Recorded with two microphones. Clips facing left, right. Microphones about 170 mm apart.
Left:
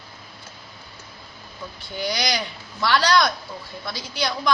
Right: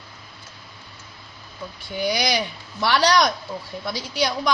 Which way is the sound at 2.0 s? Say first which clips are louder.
Right 3 dB; 10° right (ahead or behind).